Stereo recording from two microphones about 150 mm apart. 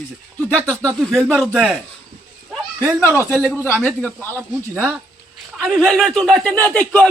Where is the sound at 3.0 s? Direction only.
15° left (ahead or behind).